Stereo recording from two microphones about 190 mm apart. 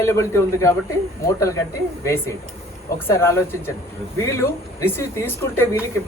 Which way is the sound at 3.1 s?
15° left (ahead or behind).